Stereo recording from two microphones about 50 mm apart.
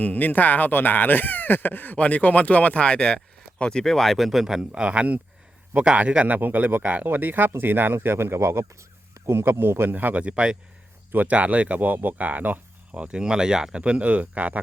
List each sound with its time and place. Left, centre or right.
0.0 s speech: left
2.0 s speech: left; by 6.3 s right
6.3 s speech: right
7.9 s speech: right
9.9 s speech: right
10.2 s speech: right
11.1 s speech: right
11.3 s speech: right